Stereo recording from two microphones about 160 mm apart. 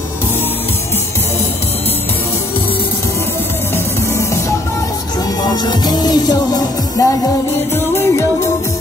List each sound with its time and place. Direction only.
5.7 s music: 25° left (ahead or behind)